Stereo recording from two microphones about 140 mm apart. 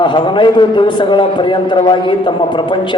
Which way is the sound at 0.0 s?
35° left (ahead or behind).